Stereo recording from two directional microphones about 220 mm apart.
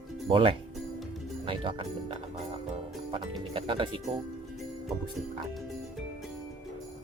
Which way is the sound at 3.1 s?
25° right (ahead or behind).